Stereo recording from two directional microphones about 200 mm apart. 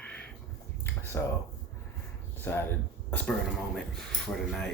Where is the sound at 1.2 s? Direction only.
10° left (ahead or behind).